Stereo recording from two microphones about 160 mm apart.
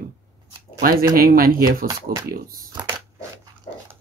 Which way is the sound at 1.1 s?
65° right (ahead or behind).